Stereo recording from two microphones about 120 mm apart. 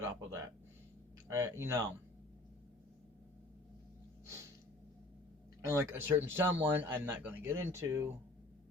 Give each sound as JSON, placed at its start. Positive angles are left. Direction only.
{"t": 0.0, "sound": "a sound", "side_deg": -25}
{"t": 1.3, "sound": "speech", "side_deg": -25}
{"t": 5.6, "sound": "speech", "side_deg": -20}